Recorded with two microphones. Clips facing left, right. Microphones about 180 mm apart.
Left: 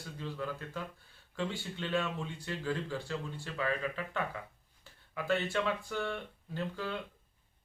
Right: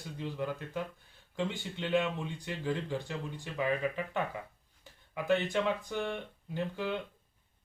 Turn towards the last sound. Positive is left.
turn(degrees=-15)  # may be behind; listen again after turning